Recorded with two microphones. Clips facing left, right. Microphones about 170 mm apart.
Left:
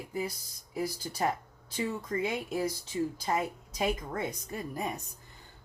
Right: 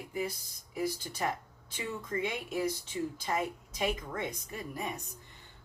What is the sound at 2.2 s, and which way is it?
Speech, 35° left (ahead or behind).